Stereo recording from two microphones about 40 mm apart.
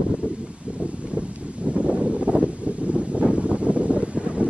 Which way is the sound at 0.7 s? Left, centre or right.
Right.